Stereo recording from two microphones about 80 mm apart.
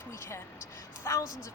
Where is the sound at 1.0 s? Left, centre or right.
Left.